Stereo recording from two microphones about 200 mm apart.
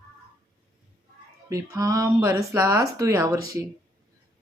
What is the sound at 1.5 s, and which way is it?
Speech, 15° right (ahead or behind).